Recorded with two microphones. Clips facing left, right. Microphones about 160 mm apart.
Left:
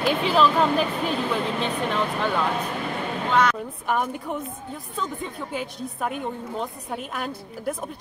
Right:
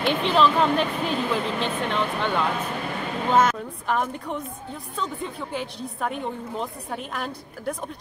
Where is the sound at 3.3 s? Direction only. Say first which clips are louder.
Right 2 dB; 45° right (ahead or behind).